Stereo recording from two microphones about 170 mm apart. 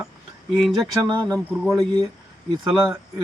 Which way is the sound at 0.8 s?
25° right (ahead or behind).